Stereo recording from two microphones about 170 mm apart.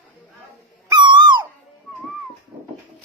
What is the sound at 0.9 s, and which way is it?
Owl, 25° right (ahead or behind).